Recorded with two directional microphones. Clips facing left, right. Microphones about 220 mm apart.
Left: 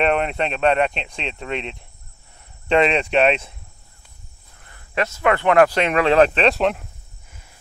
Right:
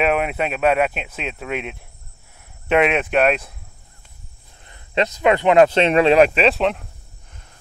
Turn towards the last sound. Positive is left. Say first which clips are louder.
# right 1 dB
turn(degrees=0)  # may be behind; listen again after turning